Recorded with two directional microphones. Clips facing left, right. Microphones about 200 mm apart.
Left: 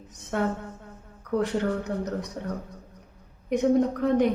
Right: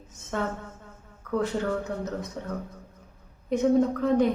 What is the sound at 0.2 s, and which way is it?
A woman's voice, 15° left (ahead or behind).